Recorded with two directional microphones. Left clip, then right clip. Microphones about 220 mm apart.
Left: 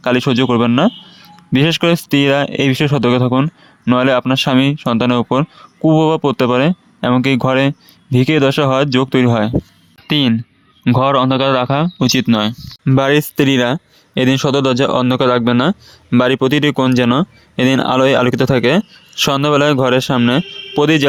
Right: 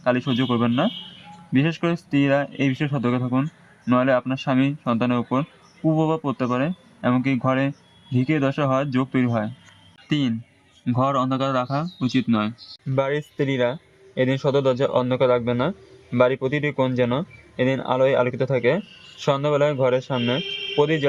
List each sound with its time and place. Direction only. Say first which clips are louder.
0.0 s speech: left 8 dB; 40° left (ahead or behind)